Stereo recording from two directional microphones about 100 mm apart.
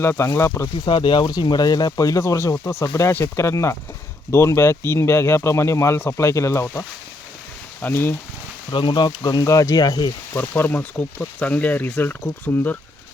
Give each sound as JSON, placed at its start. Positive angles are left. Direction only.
{"t": 0.0, "sound": "speech", "side_deg": 25}
{"t": 0.9, "sound": "speech", "side_deg": 55}
{"t": 8.7, "sound": "speech", "side_deg": 55}
{"t": 10.3, "sound": "speech", "side_deg": 20}